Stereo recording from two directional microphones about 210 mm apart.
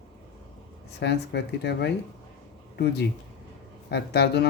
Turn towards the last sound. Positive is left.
turn(degrees=50)  # may be behind; listen again after turning